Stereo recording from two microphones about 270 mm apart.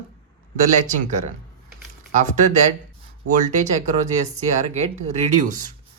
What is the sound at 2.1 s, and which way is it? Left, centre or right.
Speech, right.